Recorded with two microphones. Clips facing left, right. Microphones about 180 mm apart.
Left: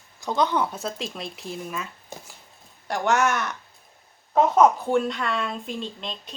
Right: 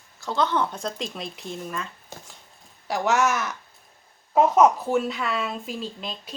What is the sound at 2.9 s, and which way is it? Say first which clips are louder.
Speech: even; centre (ahead or behind).